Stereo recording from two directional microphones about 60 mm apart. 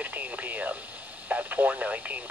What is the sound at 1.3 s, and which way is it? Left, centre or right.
Speech, right.